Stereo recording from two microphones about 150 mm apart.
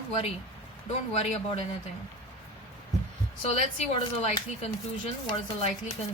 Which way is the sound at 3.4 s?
40° left (ahead or behind).